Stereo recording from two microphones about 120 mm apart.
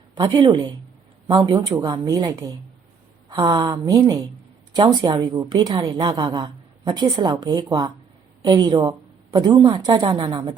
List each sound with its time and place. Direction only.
0.2 s a woman's voice: 35° right (ahead or behind)